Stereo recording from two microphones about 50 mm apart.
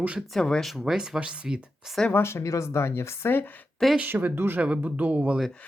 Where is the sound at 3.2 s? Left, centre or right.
Left.